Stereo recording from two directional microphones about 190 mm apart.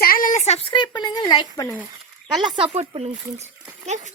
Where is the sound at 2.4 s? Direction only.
25° right (ahead or behind).